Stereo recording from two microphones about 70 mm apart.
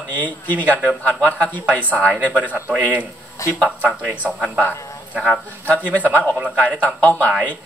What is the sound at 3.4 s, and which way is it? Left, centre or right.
Speech, left.